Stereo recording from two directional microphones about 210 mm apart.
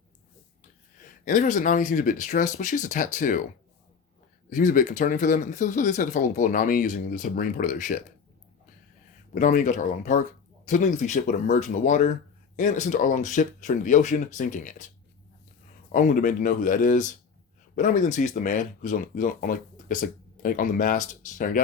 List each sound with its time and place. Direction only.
1.2 s speech: 40° left (ahead or behind)
4.4 s speech: 40° left (ahead or behind)
9.3 s speech: 35° left (ahead or behind)
15.9 s speech: 40° left (ahead or behind)